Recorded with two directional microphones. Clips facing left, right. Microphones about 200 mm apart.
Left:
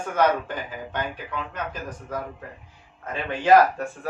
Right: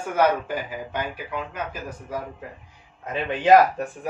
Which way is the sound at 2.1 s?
10° right (ahead or behind).